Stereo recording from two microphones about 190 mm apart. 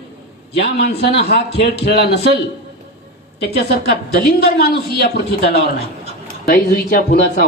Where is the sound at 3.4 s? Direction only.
55° left (ahead or behind).